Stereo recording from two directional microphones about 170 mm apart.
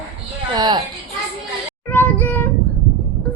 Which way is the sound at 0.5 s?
25° right (ahead or behind).